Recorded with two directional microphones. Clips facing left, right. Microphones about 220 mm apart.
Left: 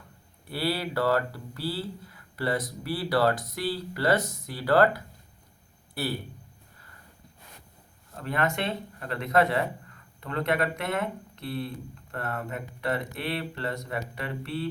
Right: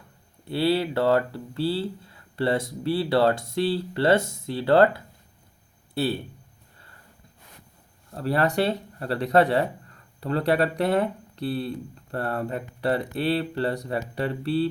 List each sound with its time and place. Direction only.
0.4 s speech: 25° right (ahead or behind)
8.1 s speech: 35° right (ahead or behind)